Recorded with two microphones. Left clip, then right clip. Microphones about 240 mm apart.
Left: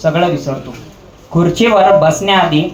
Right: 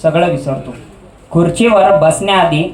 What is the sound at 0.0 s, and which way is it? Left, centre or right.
Speech, right.